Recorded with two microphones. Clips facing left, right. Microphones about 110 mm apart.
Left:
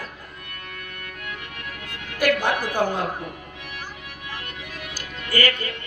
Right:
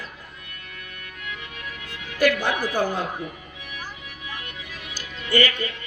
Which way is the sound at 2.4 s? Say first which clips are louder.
Left 1 dB; 50° left (ahead or behind).